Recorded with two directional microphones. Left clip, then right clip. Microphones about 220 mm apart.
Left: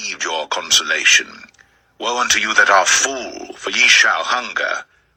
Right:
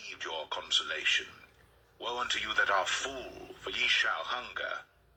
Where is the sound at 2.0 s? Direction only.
50° left (ahead or behind).